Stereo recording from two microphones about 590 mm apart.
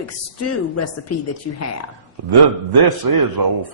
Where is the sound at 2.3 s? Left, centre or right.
Right.